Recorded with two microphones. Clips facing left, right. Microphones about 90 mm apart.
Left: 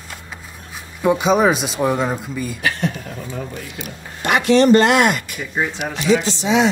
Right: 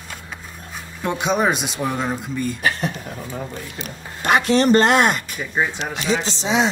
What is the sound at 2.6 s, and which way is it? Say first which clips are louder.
Speech: left 1 dB; 30° right (ahead or behind).